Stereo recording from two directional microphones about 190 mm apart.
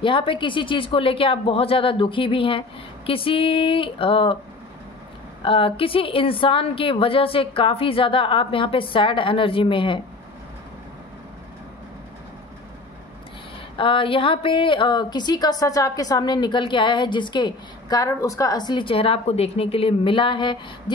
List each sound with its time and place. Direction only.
0.0 s a woman's voice: 25° left (ahead or behind)
5.4 s a woman's voice: 30° left (ahead or behind)
13.7 s a woman's voice: 30° left (ahead or behind)